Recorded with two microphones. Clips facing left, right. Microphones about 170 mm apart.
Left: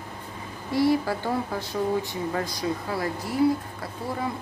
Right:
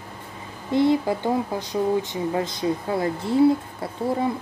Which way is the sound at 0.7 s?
20° right (ahead or behind).